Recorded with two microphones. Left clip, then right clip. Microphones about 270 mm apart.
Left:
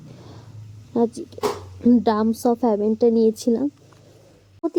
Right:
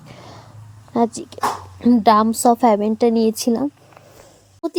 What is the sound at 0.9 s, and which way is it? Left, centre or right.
A woman's voice, right.